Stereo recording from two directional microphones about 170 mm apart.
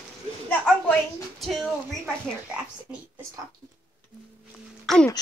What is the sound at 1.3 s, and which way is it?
Speech, centre (ahead or behind).